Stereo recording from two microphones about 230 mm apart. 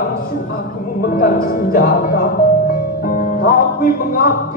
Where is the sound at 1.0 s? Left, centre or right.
Left.